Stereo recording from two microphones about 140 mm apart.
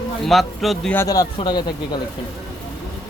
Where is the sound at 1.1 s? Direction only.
30° left (ahead or behind).